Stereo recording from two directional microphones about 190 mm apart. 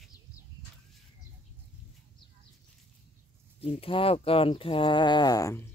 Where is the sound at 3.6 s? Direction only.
30° left (ahead or behind).